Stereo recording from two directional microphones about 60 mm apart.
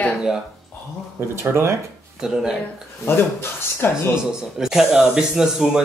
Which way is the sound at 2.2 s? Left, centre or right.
Centre.